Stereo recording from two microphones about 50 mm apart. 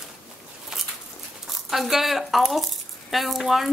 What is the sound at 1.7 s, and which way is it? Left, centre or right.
Speech, centre.